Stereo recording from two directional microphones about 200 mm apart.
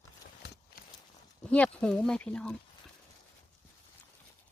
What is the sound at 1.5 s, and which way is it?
Speech, 5° left (ahead or behind).